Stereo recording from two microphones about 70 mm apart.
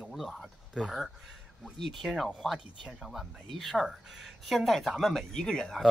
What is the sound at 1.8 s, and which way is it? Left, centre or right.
Speech, centre.